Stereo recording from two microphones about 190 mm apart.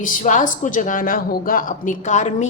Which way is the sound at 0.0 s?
45° left (ahead or behind).